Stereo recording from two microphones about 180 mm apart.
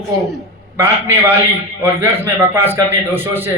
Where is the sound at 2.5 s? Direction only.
15° right (ahead or behind).